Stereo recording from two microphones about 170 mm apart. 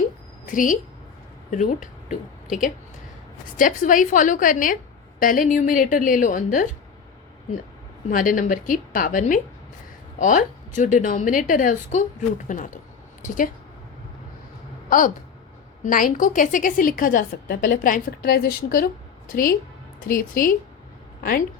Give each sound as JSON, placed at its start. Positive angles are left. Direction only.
{"t": 0.4, "sound": "a woman's voice", "side_deg": 50}
{"t": 8.1, "sound": "a woman's voice", "side_deg": 50}
{"t": 14.8, "sound": "a woman's voice", "side_deg": 55}